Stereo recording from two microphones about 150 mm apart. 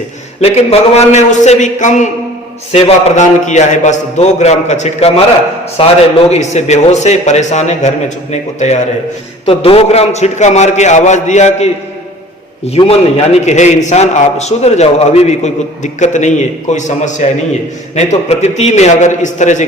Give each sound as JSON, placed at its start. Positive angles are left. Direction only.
{"t": 0.4, "sound": "a man's voice", "side_deg": 45}